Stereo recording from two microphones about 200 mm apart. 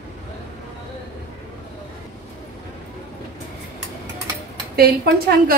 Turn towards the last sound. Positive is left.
turn(degrees=-50)  # may be behind; listen again after turning